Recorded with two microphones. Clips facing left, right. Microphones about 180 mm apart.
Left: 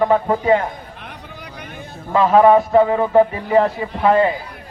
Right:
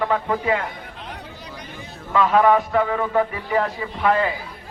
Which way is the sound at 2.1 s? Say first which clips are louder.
Left 5 dB; 30° left (ahead or behind).